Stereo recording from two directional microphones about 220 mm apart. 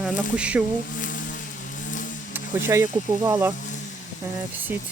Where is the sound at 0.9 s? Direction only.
35° left (ahead or behind).